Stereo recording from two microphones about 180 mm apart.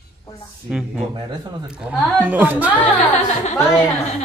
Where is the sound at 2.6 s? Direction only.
10° left (ahead or behind).